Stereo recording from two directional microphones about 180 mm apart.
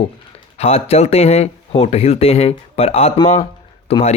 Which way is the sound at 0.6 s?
35° left (ahead or behind).